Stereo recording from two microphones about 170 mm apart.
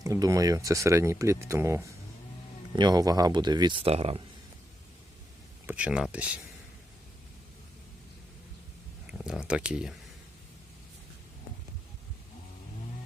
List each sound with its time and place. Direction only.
0.0 s speech: 20° right (ahead or behind); by 4.2 s 35° right (ahead or behind)
5.6 s speech: 5° right (ahead or behind)
9.2 s speech: 5° right (ahead or behind)